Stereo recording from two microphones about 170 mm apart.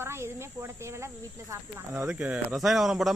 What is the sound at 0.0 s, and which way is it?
Speech, 15° right (ahead or behind).